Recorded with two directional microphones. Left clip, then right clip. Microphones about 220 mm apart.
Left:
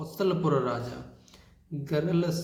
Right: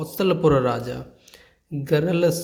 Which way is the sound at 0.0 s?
40° right (ahead or behind).